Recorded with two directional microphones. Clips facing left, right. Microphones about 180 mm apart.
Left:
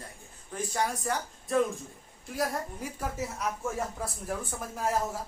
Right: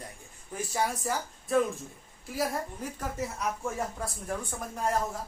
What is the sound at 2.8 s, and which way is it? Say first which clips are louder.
Speech: even; 10° left (ahead or behind).